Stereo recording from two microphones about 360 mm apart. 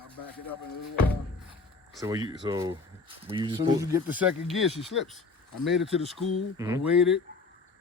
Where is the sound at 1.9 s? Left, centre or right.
Centre.